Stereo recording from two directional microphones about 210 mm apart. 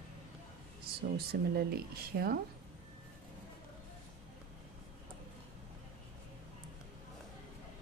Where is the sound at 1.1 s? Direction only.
50° right (ahead or behind).